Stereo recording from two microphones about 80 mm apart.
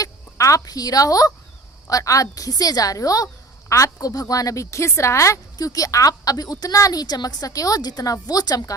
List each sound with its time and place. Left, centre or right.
0.0 s a woman's voice: left